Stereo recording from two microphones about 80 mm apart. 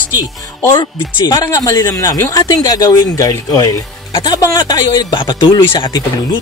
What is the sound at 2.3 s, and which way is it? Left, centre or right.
Speech, left.